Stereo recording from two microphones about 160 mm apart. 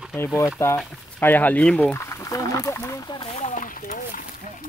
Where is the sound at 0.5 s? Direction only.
15° left (ahead or behind).